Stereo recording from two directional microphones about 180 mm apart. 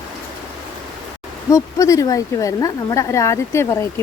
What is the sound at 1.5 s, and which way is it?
Speech, 20° left (ahead or behind).